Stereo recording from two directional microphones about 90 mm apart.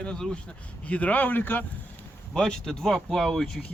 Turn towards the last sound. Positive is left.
turn(degrees=5)  # may be behind; listen again after turning